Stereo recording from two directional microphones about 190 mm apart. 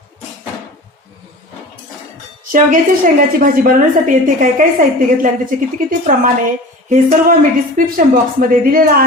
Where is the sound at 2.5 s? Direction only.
45° right (ahead or behind).